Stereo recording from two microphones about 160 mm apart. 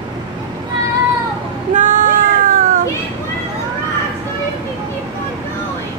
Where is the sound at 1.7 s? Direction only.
55° right (ahead or behind).